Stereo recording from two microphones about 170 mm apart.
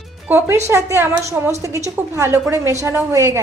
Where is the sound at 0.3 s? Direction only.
10° right (ahead or behind).